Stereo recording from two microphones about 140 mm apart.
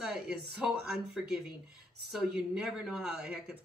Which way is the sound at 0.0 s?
5° right (ahead or behind).